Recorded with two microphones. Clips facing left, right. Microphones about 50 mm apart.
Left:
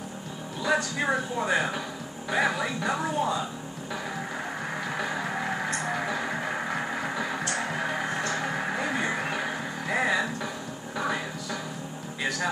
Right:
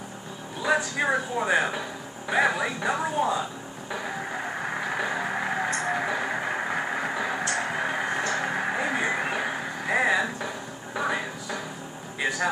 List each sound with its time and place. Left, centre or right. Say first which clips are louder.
0.6 s speech: right 2 dB; centre
3.9 s music: right 2 dB; centre
8.2 s vehicle: right 2 dB; centre
11.0 s a sound: right 2 dB; centre
12.2 s vehicle: right 3 dB; centre